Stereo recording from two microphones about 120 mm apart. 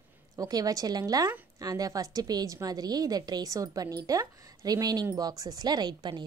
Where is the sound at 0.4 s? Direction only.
30° right (ahead or behind).